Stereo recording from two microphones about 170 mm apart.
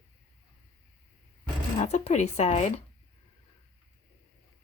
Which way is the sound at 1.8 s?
40° left (ahead or behind).